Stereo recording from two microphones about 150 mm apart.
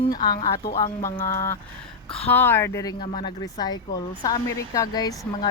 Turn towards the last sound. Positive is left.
turn(degrees=25)  # may be behind; listen again after turning